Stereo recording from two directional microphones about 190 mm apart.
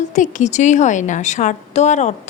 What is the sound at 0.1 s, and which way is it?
A woman's voice, 40° left (ahead or behind).